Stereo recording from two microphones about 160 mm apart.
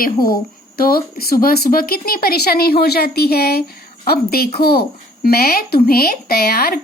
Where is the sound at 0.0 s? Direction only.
65° left (ahead or behind).